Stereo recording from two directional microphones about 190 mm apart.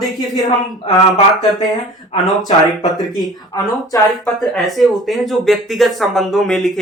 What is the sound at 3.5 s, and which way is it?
Speech, 20° left (ahead or behind).